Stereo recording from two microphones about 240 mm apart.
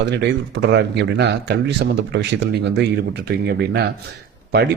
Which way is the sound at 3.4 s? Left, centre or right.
Right.